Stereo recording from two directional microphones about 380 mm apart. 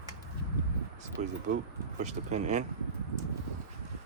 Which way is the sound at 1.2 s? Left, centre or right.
Right.